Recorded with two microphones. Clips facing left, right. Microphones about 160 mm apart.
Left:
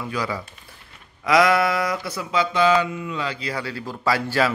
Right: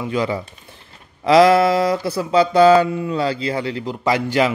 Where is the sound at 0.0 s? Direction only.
25° right (ahead or behind).